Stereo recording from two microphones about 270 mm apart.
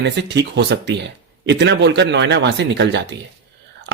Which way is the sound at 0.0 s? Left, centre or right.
Right.